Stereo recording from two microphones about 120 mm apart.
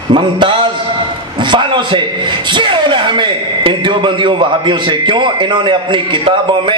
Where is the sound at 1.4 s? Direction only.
40° right (ahead or behind).